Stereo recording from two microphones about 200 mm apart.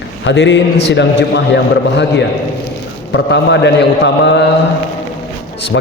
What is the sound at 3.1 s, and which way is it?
A man's voice, 60° left (ahead or behind).